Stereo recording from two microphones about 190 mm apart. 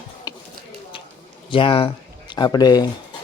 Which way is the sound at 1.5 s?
30° left (ahead or behind).